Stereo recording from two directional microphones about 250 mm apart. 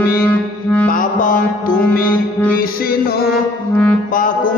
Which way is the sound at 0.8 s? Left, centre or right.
Left.